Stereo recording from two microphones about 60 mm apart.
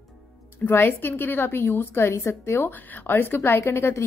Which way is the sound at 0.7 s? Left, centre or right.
Left.